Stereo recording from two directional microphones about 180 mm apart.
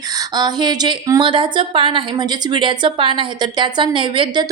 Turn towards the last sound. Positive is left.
turn(degrees=-30)  # may be behind; listen again after turning